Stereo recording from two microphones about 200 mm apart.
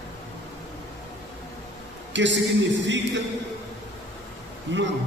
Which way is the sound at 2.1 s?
65° right (ahead or behind).